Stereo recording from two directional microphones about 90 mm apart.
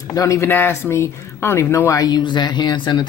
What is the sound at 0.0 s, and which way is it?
Speech, 40° left (ahead or behind).